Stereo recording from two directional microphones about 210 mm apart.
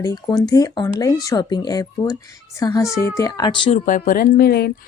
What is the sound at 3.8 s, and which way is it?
Speech, 40° left (ahead or behind).